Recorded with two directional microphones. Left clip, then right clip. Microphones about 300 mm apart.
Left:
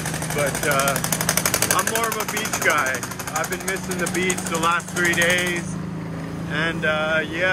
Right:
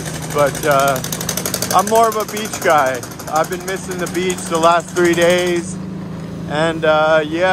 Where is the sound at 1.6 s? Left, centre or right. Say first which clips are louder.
Right 9 dB; centre.